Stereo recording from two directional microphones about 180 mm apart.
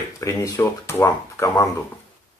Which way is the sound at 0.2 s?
15° left (ahead or behind).